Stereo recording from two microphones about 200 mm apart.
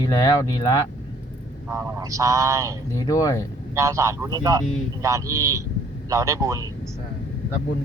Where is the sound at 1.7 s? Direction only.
15° right (ahead or behind).